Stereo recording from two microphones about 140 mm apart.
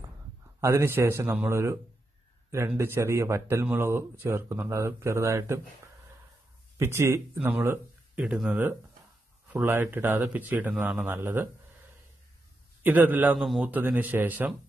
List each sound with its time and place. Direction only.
0.6 s speech: 20° right (ahead or behind)
2.8 s speech: 20° right (ahead or behind)
6.8 s a man's voice: 15° right (ahead or behind)
12.8 s a man's voice: 15° right (ahead or behind)
13.4 s a man's voice: centre (ahead or behind)
13.7 s a man's voice: 10° right (ahead or behind)